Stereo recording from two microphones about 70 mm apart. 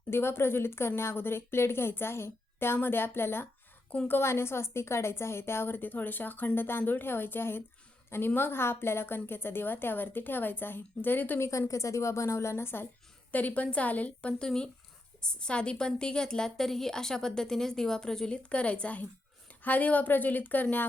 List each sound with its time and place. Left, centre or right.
0.1 s a woman's voice: left
11.3 s speech: left
13.3 s a woman's voice: left